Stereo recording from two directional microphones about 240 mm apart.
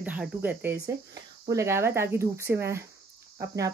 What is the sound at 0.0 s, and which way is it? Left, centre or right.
Speech, centre.